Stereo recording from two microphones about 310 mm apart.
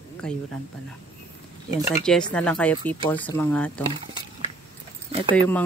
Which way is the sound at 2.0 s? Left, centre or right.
Centre.